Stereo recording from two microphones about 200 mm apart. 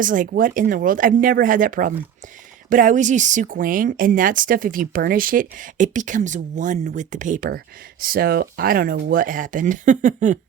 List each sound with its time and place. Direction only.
0.0 s speech: 40° right (ahead or behind)